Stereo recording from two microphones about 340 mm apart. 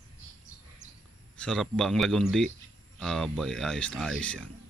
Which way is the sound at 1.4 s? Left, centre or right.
Centre.